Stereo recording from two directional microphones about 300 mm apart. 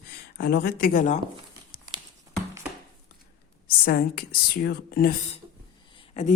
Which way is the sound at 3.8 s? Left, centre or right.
Left.